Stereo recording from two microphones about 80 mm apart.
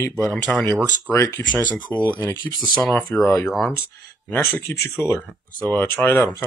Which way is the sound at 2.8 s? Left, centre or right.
Left.